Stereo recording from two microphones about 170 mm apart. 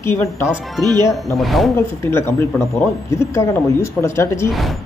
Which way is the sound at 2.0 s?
15° left (ahead or behind).